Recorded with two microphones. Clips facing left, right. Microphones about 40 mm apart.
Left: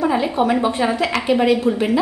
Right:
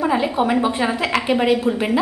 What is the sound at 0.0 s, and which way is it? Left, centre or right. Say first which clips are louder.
A woman's voice: left 1 dB; centre.